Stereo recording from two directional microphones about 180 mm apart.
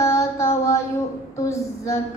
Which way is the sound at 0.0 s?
15° left (ahead or behind).